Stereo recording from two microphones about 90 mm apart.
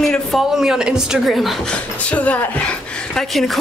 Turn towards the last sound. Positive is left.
turn(degrees=0)  # may be behind; listen again after turning